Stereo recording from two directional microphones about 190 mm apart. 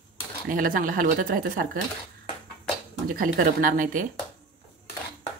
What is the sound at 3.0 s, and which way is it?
Speech, 45° right (ahead or behind).